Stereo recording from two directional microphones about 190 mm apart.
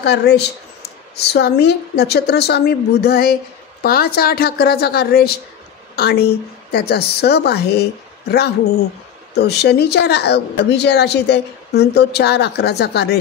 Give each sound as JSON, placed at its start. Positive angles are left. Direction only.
{"t": 0.0, "sound": "a woman's voice", "side_deg": 60}